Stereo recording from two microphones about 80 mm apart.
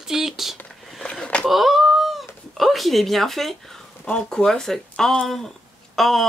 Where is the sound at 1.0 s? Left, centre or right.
Centre.